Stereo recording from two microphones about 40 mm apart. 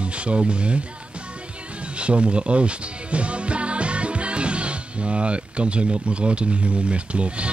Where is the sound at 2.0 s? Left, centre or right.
Right.